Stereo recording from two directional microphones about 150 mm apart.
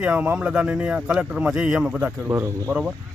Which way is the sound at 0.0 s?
10° right (ahead or behind).